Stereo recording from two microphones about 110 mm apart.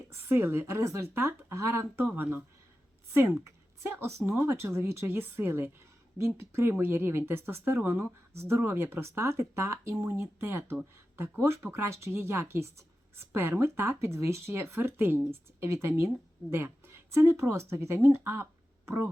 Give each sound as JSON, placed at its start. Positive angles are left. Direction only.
{"t": 0.1, "sound": "speech", "side_deg": -20}
{"t": 3.4, "sound": "a woman's voice", "side_deg": -25}